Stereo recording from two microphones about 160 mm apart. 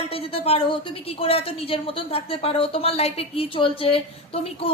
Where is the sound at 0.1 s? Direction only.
35° left (ahead or behind).